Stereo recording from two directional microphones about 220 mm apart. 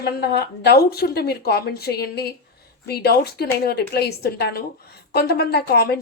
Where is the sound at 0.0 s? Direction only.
45° left (ahead or behind).